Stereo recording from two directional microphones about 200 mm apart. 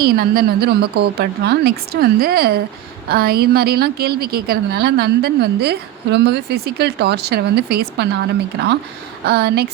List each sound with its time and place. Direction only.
0.0 s a woman's voice: 50° right (ahead or behind)